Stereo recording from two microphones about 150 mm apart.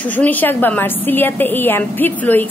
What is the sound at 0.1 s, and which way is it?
A woman's voice, 10° left (ahead or behind).